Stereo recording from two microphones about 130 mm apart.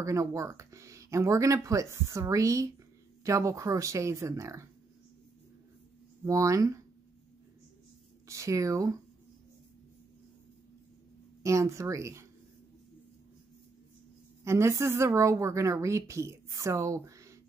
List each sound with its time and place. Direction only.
0.0 s a woman's voice: 25° right (ahead or behind)
6.2 s a woman's voice: 25° right (ahead or behind)
8.3 s a woman's voice: 25° right (ahead or behind)
11.4 s a woman's voice: 25° right (ahead or behind)
14.4 s a woman's voice: 20° right (ahead or behind)